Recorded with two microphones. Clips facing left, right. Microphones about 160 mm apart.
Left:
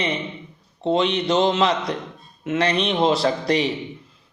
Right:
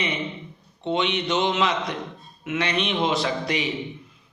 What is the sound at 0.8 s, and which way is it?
A man's voice, 35° left (ahead or behind).